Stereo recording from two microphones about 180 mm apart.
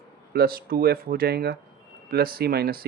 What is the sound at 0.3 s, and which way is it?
Speech, 55° right (ahead or behind).